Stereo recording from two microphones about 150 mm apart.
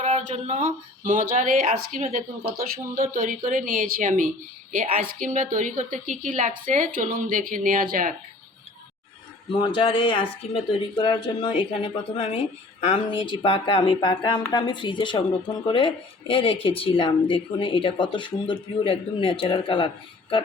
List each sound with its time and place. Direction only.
0.0 s a woman's voice: 45° right (ahead or behind); by 8.1 s 65° right (ahead or behind)
9.5 s speech: 35° left (ahead or behind)